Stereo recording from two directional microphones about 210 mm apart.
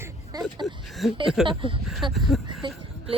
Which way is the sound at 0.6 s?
Centre (ahead or behind).